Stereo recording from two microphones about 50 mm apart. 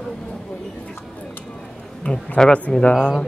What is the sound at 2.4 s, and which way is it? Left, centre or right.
Speech, centre.